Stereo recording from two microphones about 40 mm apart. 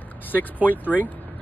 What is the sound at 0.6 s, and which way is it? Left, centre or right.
Speech, left.